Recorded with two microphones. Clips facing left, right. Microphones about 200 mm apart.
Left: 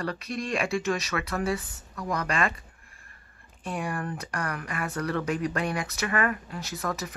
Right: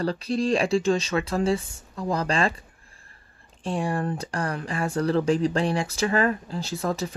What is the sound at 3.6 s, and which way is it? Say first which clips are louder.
Speech: right 5 dB; 30° right (ahead or behind).